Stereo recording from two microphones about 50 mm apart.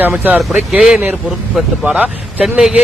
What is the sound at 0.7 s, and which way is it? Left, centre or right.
Speech, centre.